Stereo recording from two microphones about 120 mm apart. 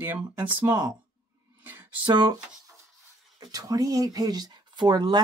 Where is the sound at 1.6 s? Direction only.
15° right (ahead or behind).